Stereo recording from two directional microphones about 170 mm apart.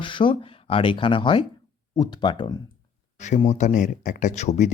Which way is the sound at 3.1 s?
45° left (ahead or behind).